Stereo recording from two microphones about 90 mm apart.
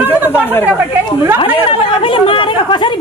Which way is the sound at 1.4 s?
75° left (ahead or behind).